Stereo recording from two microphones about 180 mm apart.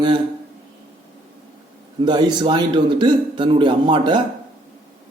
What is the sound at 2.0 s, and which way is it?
A man's voice, 25° right (ahead or behind).